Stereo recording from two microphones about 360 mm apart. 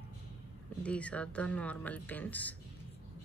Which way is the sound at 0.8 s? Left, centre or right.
Centre.